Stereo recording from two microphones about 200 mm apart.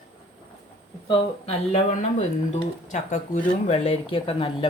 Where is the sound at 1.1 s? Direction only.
30° left (ahead or behind).